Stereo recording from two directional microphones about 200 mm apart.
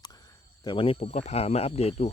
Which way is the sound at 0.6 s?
25° left (ahead or behind).